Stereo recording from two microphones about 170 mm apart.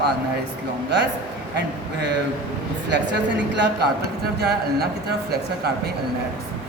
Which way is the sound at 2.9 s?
90° right.